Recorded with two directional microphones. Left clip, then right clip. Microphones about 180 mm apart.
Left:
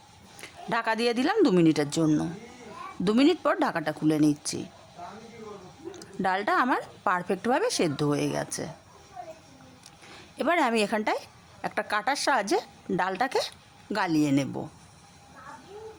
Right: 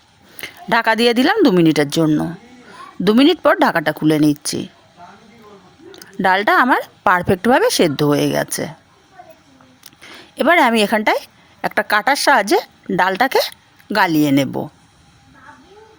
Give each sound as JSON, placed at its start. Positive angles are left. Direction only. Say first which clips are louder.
{"t": 0.3, "sound": "a woman's voice", "louder": "right 12 dB", "side_deg": -35}
{"t": 5.9, "sound": "a woman's voice", "louder": "right 12 dB", "side_deg": -35}
{"t": 9.8, "sound": "speech", "louder": "right 11 dB", "side_deg": -35}